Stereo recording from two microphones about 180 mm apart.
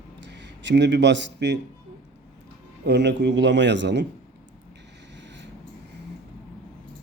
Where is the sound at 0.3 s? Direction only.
80° right.